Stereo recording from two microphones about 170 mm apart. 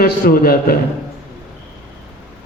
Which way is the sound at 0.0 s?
60° left (ahead or behind).